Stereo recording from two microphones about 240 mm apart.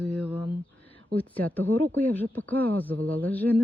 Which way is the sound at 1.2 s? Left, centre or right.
Centre.